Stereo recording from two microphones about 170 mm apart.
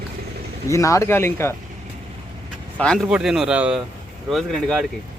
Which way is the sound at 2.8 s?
5° left (ahead or behind).